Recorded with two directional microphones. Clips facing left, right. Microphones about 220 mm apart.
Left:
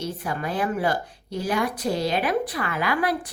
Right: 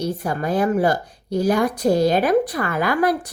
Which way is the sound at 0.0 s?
40° right (ahead or behind).